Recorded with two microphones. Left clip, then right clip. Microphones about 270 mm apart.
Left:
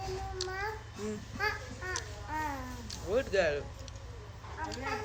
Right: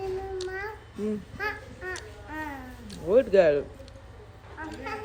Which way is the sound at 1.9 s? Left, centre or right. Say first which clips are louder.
Left 4 dB; centre.